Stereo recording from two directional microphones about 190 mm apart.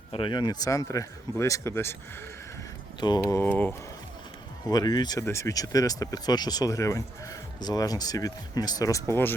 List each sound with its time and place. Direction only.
0.1 s speech: 25° left (ahead or behind)
3.0 s speech: 20° left (ahead or behind)
4.7 s speech: 20° left (ahead or behind)